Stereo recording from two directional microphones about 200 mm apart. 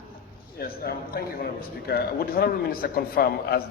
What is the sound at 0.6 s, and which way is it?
A man's voice, 50° left (ahead or behind).